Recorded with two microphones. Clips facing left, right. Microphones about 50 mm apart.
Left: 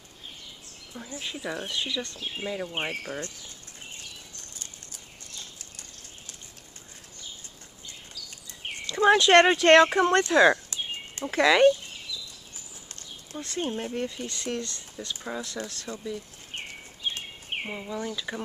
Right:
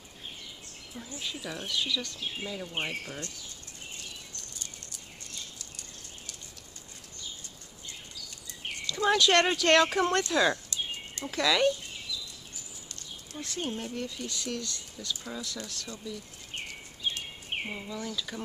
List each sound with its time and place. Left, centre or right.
1.2 s speech: left
8.7 s speech: left
12.8 s a sound: left
13.7 s speech: left
17.5 s a sound: centre
17.8 s speech: left